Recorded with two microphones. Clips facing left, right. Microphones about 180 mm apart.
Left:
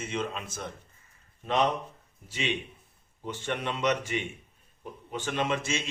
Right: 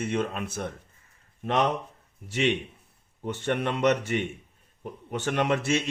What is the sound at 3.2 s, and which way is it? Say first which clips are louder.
Speech: right 5 dB; 60° right (ahead or behind).